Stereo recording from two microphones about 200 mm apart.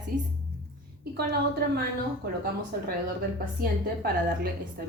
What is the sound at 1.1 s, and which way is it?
A woman's voice, 55° right (ahead or behind).